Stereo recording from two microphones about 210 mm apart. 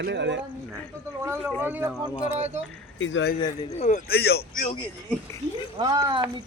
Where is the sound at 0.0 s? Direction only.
55° right (ahead or behind).